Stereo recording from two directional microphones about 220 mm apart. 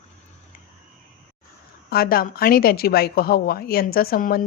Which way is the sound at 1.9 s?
45° left (ahead or behind).